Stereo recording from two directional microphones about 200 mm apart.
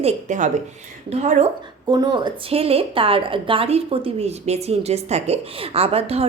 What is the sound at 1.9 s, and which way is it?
A woman's voice, 20° right (ahead or behind).